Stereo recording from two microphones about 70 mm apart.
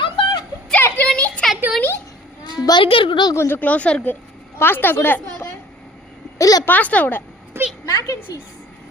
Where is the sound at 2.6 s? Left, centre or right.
Left.